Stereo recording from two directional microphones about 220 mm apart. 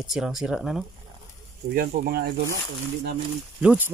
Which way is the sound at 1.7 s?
45° right (ahead or behind).